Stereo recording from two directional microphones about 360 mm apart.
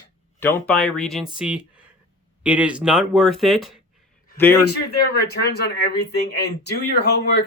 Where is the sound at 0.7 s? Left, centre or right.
Centre.